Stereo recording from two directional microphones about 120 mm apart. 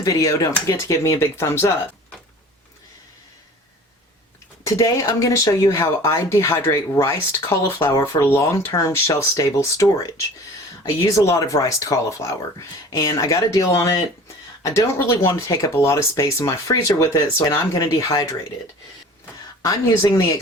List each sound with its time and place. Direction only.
0.0 s speech: 30° left (ahead or behind)
4.6 s speech: 25° left (ahead or behind)
10.8 s speech: 25° left (ahead or behind)
19.6 s speech: 25° left (ahead or behind)